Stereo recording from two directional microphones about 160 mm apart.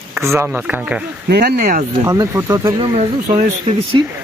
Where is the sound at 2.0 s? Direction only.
20° right (ahead or behind).